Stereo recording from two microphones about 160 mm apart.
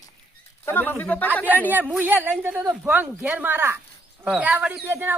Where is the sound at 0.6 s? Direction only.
15° left (ahead or behind).